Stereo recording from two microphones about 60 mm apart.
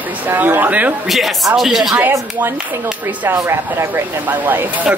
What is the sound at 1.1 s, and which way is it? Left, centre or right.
Speech, centre.